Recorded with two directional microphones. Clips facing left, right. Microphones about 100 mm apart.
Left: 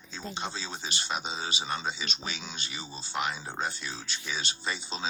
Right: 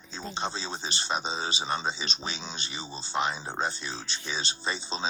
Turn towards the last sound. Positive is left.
turn(degrees=-30)  # may be behind; listen again after turning